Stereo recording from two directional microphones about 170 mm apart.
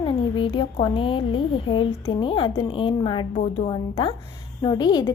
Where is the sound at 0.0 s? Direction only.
30° left (ahead or behind).